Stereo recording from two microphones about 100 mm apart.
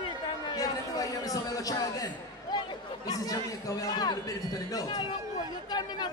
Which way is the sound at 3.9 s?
40° left (ahead or behind).